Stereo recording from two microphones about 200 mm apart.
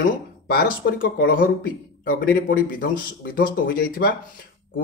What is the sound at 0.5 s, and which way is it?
Speech, 45° left (ahead or behind).